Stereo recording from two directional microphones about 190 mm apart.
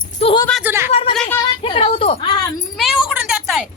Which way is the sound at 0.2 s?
30° left (ahead or behind).